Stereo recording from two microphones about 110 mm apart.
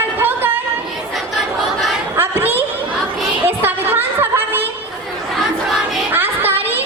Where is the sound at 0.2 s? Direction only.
20° right (ahead or behind).